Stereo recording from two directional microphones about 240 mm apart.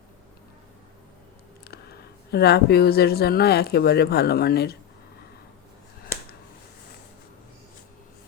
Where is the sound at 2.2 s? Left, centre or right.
Left.